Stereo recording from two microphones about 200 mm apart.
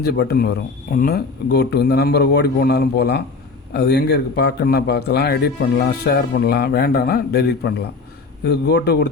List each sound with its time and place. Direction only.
0.0 s speech: 55° left (ahead or behind)